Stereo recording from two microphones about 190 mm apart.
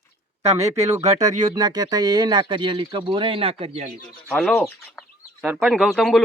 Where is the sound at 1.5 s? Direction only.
20° right (ahead or behind).